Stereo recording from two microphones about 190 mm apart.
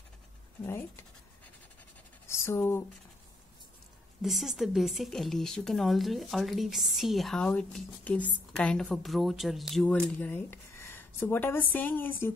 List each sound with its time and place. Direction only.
0.7 s scratch: 10° left (ahead or behind)
2.2 s a sound: 15° left (ahead or behind)
4.2 s speech: centre (ahead or behind)